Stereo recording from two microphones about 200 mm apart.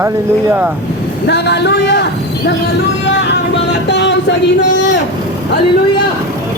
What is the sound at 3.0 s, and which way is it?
Music, 60° left (ahead or behind).